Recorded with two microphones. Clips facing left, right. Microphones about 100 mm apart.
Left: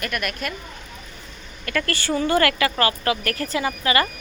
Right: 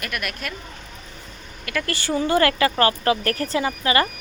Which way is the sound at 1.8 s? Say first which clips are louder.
Right 1 dB; 20° right (ahead or behind).